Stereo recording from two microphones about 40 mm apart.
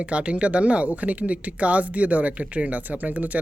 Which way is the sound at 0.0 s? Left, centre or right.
Right.